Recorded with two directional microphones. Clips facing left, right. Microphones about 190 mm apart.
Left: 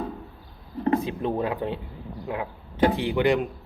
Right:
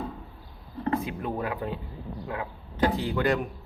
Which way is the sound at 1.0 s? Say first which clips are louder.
Left 5 dB; 25° left (ahead or behind).